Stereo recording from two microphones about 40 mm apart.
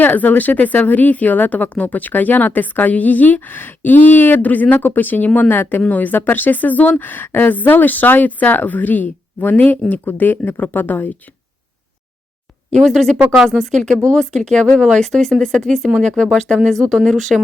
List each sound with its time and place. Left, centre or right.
0.0 s speech: left
4.8 s speech: left
12.8 s speech: centre
13.3 s speech: centre
13.6 s speech: centre
16.0 s speech: left; by 17.4 s centre